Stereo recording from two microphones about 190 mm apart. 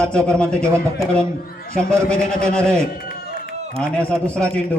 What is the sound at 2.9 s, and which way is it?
Run, 50° left (ahead or behind).